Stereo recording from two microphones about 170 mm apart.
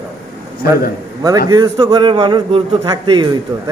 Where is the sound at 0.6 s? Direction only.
65° left (ahead or behind).